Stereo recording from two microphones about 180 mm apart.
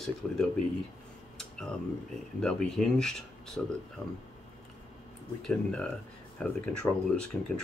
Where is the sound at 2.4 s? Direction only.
5° left (ahead or behind).